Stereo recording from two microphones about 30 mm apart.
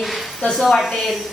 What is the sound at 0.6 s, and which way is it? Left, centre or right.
Speech, centre.